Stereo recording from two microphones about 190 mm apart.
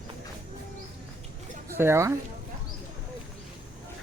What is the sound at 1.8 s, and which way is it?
Speech, 15° right (ahead or behind).